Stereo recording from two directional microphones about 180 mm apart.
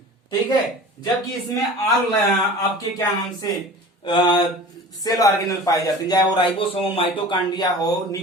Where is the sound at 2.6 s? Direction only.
20° left (ahead or behind).